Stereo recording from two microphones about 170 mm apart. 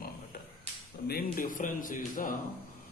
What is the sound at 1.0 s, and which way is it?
A man's voice, 60° left (ahead or behind).